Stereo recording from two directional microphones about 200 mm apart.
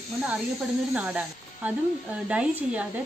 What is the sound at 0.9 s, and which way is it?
Speech, 5° right (ahead or behind).